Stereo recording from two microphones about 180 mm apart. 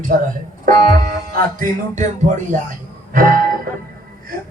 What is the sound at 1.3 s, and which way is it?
A man's voice, 50° right (ahead or behind).